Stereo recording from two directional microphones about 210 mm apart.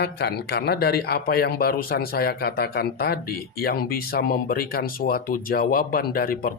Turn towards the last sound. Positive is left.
turn(degrees=40)  # may be behind; listen again after turning